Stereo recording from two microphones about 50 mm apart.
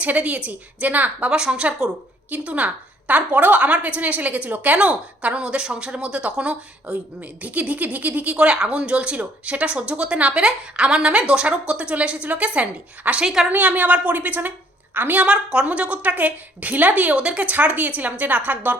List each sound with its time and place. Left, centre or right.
0.0 s a woman's voice: right
1.3 s a woman's voice: centre
13.2 s a woman's voice: centre
13.5 s a woman's voice: right
15.3 s a woman's voice: centre
17.5 s a woman's voice: right